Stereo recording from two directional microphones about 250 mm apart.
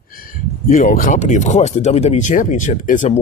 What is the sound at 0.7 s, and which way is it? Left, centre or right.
Speech, left.